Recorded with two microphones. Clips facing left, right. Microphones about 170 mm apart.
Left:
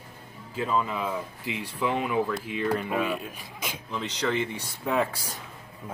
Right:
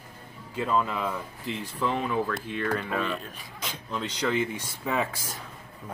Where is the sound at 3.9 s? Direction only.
5° right (ahead or behind).